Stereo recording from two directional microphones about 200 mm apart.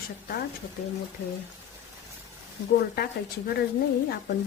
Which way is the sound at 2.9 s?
45° left (ahead or behind).